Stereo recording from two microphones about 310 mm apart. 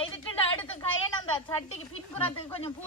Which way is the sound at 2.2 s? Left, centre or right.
Centre.